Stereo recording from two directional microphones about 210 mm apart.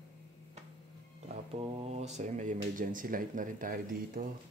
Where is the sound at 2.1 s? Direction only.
35° right (ahead or behind).